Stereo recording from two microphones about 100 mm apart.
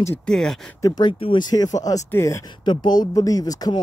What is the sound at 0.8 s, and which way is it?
Speech, 45° left (ahead or behind).